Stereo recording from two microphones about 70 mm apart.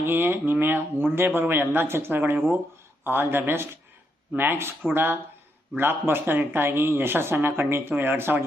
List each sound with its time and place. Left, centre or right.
0.0 s speech: right